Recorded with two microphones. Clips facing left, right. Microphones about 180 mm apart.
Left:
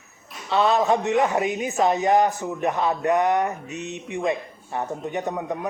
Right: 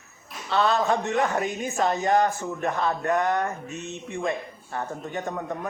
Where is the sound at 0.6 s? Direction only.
25° left (ahead or behind).